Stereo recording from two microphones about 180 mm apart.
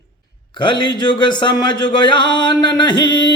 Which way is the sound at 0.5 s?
25° left (ahead or behind).